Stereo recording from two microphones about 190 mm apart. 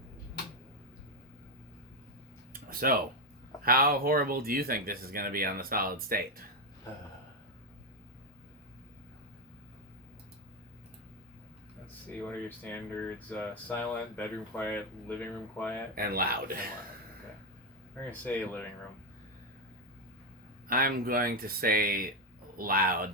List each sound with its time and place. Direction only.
2.5 s a sound: 50° right (ahead or behind)
3.6 s speech: 50° right (ahead or behind)
12.2 s speech: 10° left (ahead or behind)
16.0 s speech: 50° right (ahead or behind)
17.9 s speech: 10° left (ahead or behind)
20.7 s speech: 50° right (ahead or behind)